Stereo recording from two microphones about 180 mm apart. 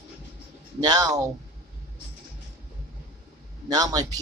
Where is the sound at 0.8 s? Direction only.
20° right (ahead or behind).